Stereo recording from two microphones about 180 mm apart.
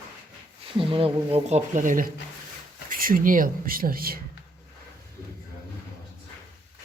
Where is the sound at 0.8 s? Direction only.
30° right (ahead or behind); by 4.2 s 55° right (ahead or behind).